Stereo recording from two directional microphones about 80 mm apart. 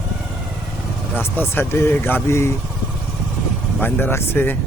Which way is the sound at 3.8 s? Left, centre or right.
Left.